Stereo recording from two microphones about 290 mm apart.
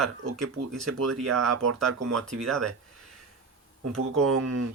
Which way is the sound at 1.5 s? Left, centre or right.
Right.